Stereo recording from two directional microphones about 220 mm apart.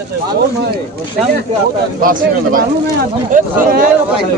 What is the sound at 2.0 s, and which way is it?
Speech, 40° right (ahead or behind).